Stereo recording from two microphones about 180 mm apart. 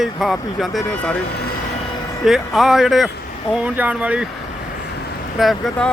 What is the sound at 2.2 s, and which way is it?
Speech, centre (ahead or behind).